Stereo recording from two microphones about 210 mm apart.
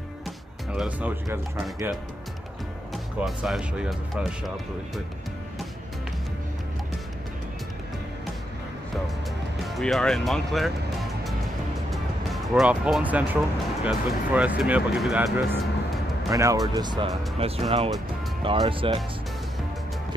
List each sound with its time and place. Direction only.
0.7 s speech: 5° right (ahead or behind)
2.9 s speech: centre (ahead or behind)
9.7 s music: centre (ahead or behind)
13.8 s speech: 5° right (ahead or behind)
16.3 s speech: 15° right (ahead or behind)